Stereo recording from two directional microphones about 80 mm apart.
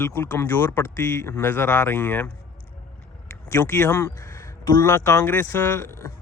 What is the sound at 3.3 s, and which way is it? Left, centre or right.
Speech, left.